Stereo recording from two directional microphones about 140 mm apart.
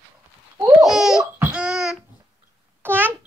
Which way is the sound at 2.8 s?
15° right (ahead or behind).